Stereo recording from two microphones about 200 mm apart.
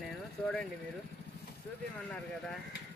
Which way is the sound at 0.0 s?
5° left (ahead or behind).